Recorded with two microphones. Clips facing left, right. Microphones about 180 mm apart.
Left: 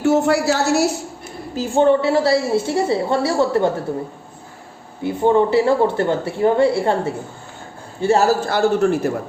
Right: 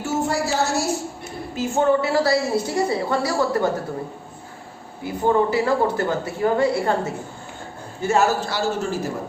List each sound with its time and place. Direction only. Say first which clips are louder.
0.0 s a woman's voice: left 7 dB; 65° left (ahead or behind)
1.5 s a woman's voice: left 4 dB; 30° left (ahead or behind)
5.0 s a woman's voice: left 4 dB; 25° left (ahead or behind)
8.4 s a man's voice: left 8 dB; 55° left (ahead or behind)